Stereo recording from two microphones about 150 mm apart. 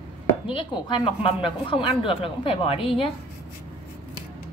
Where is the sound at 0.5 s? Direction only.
35° left (ahead or behind).